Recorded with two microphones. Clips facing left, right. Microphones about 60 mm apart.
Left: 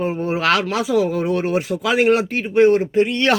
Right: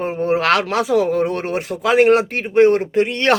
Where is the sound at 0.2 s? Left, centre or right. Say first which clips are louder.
Right 5 dB; right.